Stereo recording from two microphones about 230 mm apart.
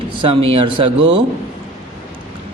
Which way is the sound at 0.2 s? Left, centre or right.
Right.